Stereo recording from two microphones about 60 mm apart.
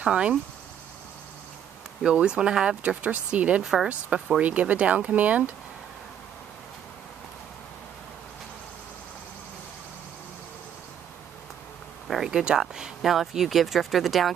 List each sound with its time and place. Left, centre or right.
0.0 s speech: centre
2.0 s speech: centre
2.8 s speech: right
3.6 s speech: centre
4.4 s speech: right
12.1 s speech: centre